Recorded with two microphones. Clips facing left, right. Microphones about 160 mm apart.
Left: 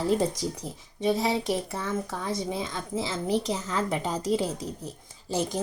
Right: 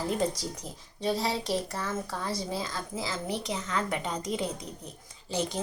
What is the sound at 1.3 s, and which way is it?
Speech, 20° left (ahead or behind).